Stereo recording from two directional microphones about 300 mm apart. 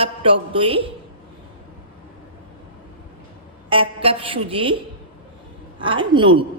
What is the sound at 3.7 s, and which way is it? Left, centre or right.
A woman's voice, centre.